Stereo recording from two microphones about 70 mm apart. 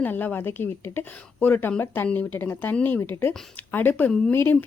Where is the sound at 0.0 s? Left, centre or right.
Left.